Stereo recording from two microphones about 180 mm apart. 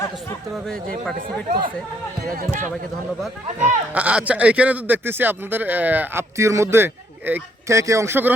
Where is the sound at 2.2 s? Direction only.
50° right (ahead or behind).